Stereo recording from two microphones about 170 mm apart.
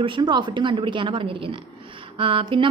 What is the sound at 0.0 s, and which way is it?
A woman's voice, 30° right (ahead or behind).